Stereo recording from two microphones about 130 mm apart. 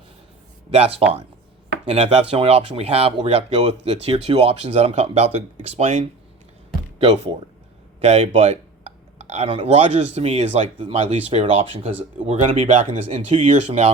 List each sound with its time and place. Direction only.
0.7 s speech: 50° right (ahead or behind)